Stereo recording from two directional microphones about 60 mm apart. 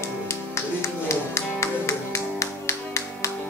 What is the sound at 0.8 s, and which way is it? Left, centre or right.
Music, left.